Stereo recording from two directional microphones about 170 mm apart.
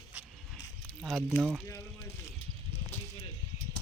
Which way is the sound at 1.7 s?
15° left (ahead or behind).